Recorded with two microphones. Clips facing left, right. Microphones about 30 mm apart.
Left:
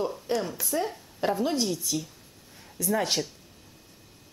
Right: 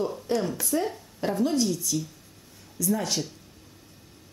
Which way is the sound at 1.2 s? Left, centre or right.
Centre.